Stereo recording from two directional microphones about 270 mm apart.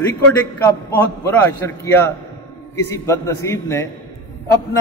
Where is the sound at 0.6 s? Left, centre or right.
Centre.